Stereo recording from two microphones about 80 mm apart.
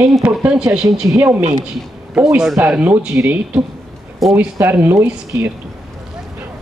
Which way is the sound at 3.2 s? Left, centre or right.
Right.